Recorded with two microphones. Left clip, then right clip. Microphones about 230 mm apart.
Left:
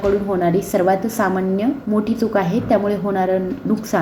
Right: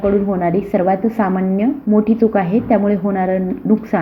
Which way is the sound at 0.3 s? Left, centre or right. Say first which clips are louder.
Right 1 dB; centre.